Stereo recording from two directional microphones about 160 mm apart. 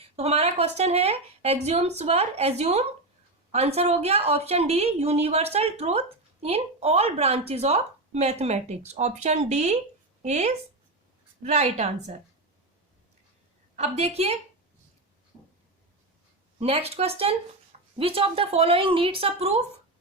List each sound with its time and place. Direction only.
0.2 s a woman's voice: 40° right (ahead or behind)
13.7 s a woman's voice: 40° right (ahead or behind)
16.6 s a woman's voice: 40° right (ahead or behind)